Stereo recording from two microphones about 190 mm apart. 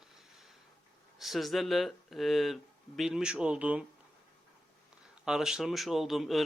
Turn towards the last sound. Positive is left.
turn(degrees=0)  # may be behind; listen again after turning